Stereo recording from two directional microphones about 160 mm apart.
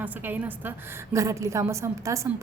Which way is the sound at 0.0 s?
10° right (ahead or behind).